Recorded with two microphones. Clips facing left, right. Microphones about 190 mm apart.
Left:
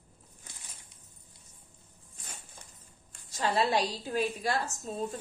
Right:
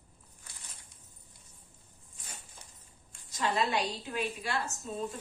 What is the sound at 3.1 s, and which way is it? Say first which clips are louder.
A woman's voice: left 2 dB; 35° left (ahead or behind).